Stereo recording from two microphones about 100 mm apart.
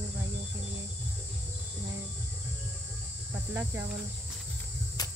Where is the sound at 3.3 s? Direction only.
25° right (ahead or behind).